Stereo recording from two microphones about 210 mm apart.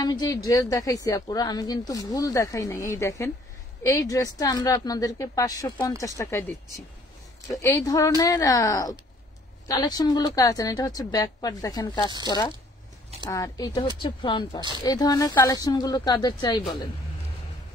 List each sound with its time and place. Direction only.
0.0 s a woman's voice: 15° left (ahead or behind)
7.6 s a woman's voice: 15° left (ahead or behind)